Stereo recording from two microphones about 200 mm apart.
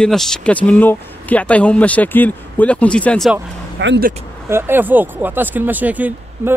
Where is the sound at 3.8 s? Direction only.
60° right (ahead or behind).